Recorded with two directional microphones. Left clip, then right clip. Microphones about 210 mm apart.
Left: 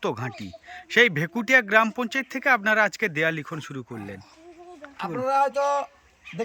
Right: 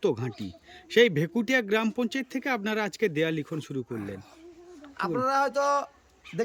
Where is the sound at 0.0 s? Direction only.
5° right (ahead or behind).